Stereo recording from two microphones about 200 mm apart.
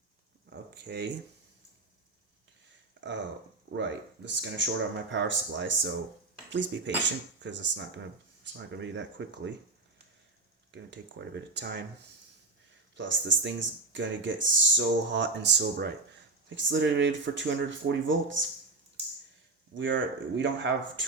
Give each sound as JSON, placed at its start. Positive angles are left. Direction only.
{"t": 0.7, "sound": "speech", "side_deg": -55}
{"t": 3.0, "sound": "a sound", "side_deg": -65}
{"t": 3.7, "sound": "speech", "side_deg": -60}
{"t": 10.7, "sound": "speech", "side_deg": -65}
{"t": 13.0, "sound": "speech", "side_deg": -65}
{"t": 16.5, "sound": "speech", "side_deg": -70}
{"t": 19.7, "sound": "speech", "side_deg": -65}